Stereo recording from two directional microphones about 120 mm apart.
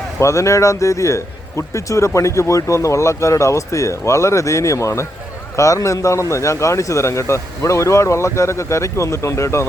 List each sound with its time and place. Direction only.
0.2 s a man's voice: 25° left (ahead or behind)